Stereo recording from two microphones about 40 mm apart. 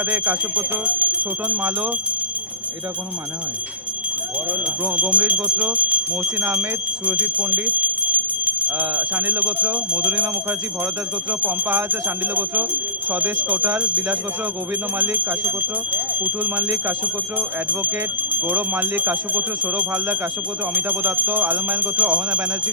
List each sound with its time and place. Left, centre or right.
0.0 s speech: right
1.2 s speech: right
4.9 s speech: right
6.4 s speech: right
7.0 s speech: right
11.3 s speech: right
13.7 s speech: right